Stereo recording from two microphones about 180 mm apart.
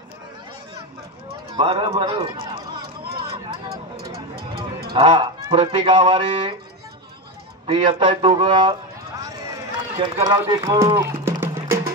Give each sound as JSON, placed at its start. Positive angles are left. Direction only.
{"t": 1.6, "sound": "speech", "side_deg": -30}
{"t": 4.4, "sound": "a sound", "side_deg": -60}
{"t": 4.9, "sound": "speech", "side_deg": -30}
{"t": 7.6, "sound": "speech", "side_deg": -30}
{"t": 9.9, "sound": "a man's voice", "side_deg": -30}
{"t": 10.2, "sound": "music", "side_deg": -20}